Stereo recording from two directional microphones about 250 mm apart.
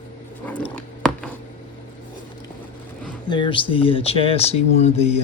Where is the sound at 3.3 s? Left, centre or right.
Centre.